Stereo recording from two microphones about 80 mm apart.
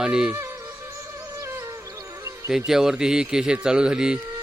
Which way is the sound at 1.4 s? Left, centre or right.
Right.